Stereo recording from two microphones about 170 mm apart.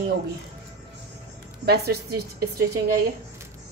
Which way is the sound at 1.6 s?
70° right (ahead or behind).